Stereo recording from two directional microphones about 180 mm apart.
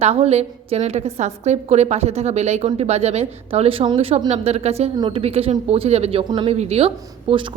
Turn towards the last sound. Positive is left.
turn(degrees=-30)  # may be behind; listen again after turning